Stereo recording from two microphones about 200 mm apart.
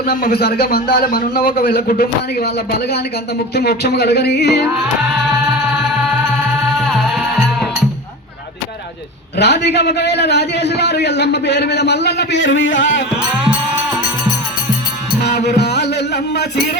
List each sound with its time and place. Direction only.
0.0 s a man's voice: 50° left (ahead or behind)
6.7 s music: centre (ahead or behind)
9.4 s a man's voice: 55° left (ahead or behind)
15.2 s music: 55° left (ahead or behind)